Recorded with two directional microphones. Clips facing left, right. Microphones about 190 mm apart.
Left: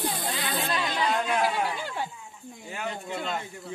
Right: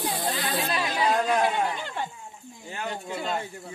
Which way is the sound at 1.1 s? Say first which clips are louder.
Right 5 dB; 40° right (ahead or behind).